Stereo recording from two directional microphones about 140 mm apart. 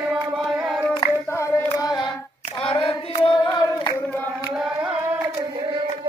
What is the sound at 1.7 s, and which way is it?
Child singing, 30° left (ahead or behind).